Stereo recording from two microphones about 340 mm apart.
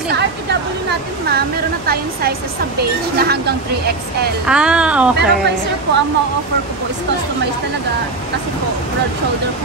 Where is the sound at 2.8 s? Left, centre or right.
Right.